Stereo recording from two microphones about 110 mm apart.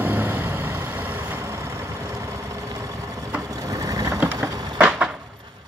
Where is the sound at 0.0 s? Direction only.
20° right (ahead or behind).